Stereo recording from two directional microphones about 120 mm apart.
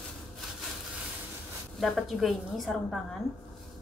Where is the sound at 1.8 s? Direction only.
Centre (ahead or behind).